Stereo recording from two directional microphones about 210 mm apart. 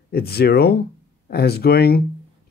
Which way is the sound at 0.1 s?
50° left (ahead or behind).